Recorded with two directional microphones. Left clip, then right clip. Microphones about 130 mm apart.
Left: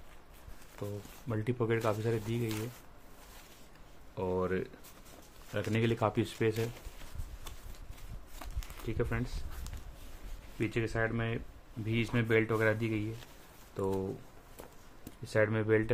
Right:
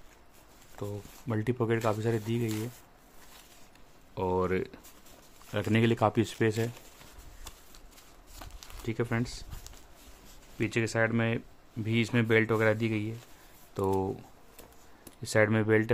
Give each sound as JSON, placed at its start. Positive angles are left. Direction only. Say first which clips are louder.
{"t": 1.3, "sound": "speech", "louder": "right 3 dB", "side_deg": -45}
{"t": 4.1, "sound": "speech", "louder": "right 4 dB", "side_deg": -45}
{"t": 8.8, "sound": "speech", "louder": "right 4 dB", "side_deg": -45}
{"t": 10.6, "sound": "speech", "louder": "right 5 dB", "side_deg": -50}
{"t": 13.7, "sound": "speech", "louder": "right 5 dB", "side_deg": -65}
{"t": 15.2, "sound": "speech", "louder": "right 4 dB", "side_deg": -55}